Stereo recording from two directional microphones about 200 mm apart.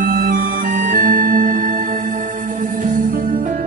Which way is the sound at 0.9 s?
40° right (ahead or behind).